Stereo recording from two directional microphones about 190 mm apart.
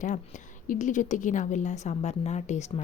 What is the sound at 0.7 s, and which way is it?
A woman's voice, 40° left (ahead or behind).